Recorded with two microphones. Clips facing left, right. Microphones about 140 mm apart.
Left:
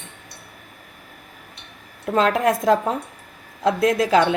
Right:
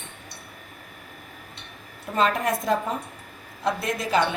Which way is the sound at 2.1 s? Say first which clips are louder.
Left 5 dB; 90° left.